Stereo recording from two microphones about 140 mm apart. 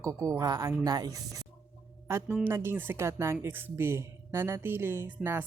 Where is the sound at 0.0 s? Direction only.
25° right (ahead or behind).